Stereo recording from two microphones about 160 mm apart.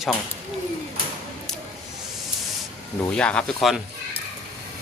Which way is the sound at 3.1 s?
5° left (ahead or behind).